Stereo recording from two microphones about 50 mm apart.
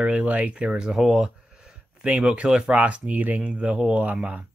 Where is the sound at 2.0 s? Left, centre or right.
Right.